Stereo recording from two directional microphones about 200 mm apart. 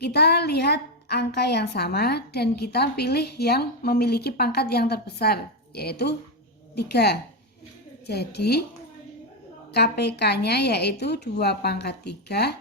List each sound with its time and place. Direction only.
0.0 s a woman's voice: 55° left (ahead or behind)
9.7 s a woman's voice: 55° left (ahead or behind)